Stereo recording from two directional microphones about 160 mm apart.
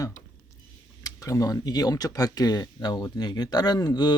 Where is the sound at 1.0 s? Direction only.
20° left (ahead or behind).